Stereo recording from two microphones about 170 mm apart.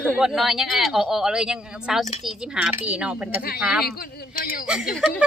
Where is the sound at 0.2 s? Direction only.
Centre (ahead or behind).